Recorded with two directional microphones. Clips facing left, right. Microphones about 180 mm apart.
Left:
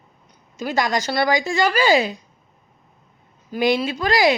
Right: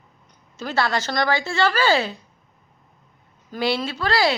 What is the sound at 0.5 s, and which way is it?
Speech, 15° left (ahead or behind).